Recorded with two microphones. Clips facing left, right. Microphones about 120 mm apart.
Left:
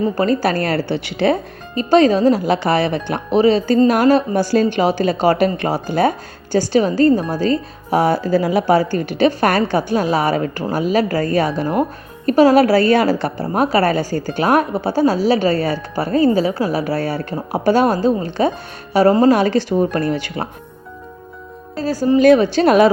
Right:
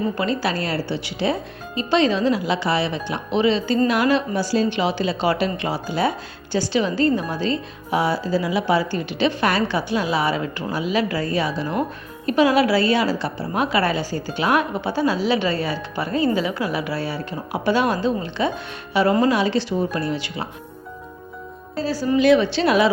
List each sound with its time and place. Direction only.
0.2 s speech: 45° left (ahead or behind)
4.4 s speech: 55° left (ahead or behind)
22.2 s speech: 45° left (ahead or behind)